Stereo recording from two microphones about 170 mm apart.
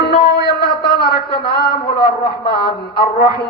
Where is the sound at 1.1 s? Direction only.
70° left (ahead or behind).